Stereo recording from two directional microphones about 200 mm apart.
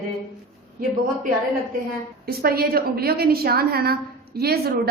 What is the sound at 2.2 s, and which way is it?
A woman's voice, 50° right (ahead or behind).